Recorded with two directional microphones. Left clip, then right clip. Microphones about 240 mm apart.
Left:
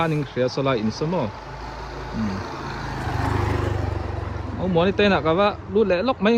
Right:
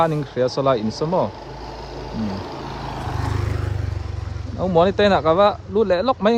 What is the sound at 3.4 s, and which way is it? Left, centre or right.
Vehicle, left.